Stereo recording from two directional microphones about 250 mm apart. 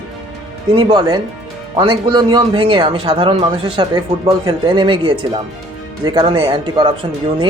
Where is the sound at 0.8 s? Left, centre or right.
Centre.